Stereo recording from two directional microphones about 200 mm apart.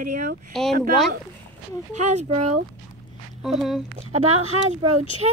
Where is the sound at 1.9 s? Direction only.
35° right (ahead or behind).